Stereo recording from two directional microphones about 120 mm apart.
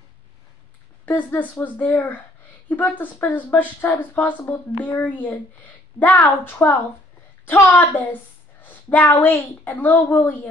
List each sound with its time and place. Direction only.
1.0 s a woman's voice: 15° left (ahead or behind)